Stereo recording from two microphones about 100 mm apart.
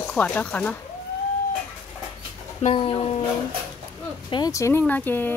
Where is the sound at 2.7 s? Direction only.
60° left (ahead or behind).